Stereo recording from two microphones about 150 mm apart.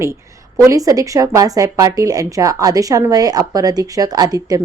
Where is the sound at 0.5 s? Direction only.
20° right (ahead or behind).